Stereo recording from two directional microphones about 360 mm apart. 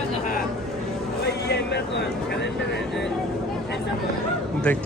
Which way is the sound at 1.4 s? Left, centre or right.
Left.